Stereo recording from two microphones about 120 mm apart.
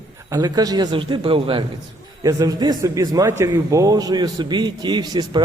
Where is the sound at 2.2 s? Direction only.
30° right (ahead or behind).